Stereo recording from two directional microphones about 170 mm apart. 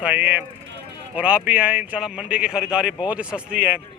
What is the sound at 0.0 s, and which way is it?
Speech, 10° right (ahead or behind).